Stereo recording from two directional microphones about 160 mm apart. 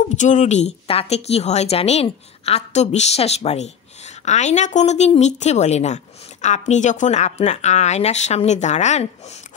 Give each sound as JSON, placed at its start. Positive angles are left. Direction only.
{"t": 0.0, "sound": "speech", "side_deg": 50}